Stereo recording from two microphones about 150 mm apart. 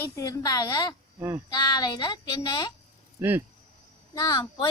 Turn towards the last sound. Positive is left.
turn(degrees=25)  # may be behind; listen again after turning